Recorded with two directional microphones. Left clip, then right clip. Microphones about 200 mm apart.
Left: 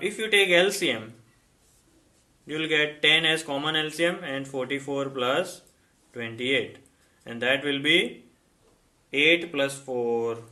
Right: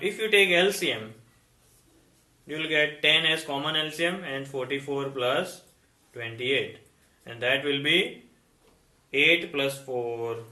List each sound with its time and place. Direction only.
0.0 s speech: 40° left (ahead or behind)
2.5 s speech: 45° left (ahead or behind)
9.0 s speech: 40° left (ahead or behind)